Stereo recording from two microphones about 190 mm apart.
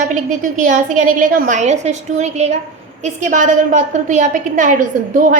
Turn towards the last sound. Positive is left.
turn(degrees=-45)  # may be behind; listen again after turning